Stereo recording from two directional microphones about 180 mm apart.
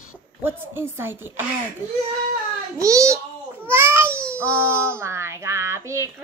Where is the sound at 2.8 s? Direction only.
15° right (ahead or behind).